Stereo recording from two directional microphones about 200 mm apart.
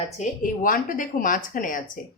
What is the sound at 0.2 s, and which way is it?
A woman's voice, 40° left (ahead or behind).